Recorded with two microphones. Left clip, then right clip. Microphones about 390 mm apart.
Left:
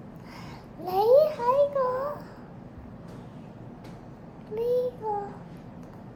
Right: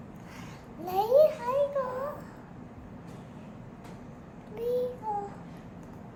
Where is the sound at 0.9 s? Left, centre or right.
Centre.